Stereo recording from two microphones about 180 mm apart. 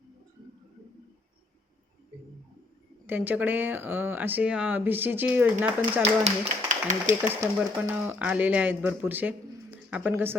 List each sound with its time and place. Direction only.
3.1 s speech: 10° right (ahead or behind)
6.0 s speech: 35° right (ahead or behind)
7.8 s speech: 10° right (ahead or behind)